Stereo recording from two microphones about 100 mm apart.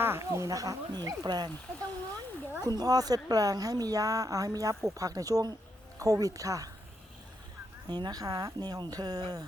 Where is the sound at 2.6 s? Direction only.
40° right (ahead or behind).